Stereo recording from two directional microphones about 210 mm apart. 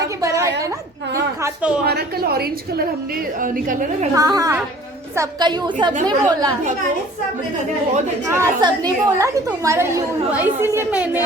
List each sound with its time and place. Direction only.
0.0 s a sound: 15° right (ahead or behind)
1.1 s a woman's voice: 10° right (ahead or behind)
1.8 s a woman's voice: 50° right (ahead or behind)
4.1 s a woman's voice: 15° right (ahead or behind)
8.3 s a woman's voice: 15° right (ahead or behind)